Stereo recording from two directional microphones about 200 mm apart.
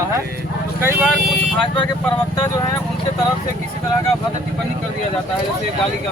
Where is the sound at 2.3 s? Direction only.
20° left (ahead or behind).